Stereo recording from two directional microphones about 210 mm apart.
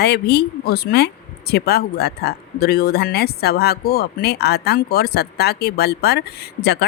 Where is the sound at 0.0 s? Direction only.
50° left (ahead or behind).